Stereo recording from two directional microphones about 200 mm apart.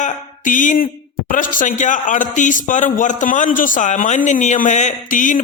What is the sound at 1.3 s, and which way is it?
Speech, 40° left (ahead or behind).